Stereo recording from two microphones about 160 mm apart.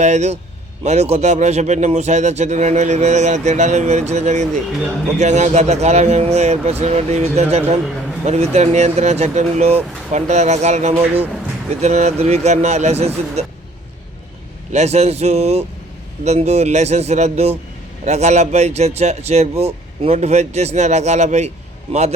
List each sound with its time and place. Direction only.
0.0 s speech: 45° right (ahead or behind)
14.7 s speech: 45° right (ahead or behind)